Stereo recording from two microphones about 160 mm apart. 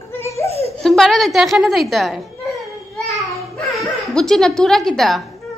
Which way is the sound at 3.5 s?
Centre (ahead or behind).